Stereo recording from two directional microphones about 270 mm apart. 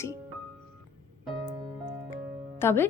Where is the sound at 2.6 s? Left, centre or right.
Centre.